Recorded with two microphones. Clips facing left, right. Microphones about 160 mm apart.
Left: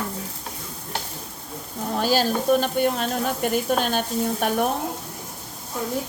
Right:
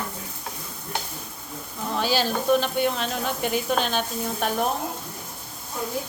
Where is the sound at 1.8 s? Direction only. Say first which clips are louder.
Left 3 dB; 45° left (ahead or behind).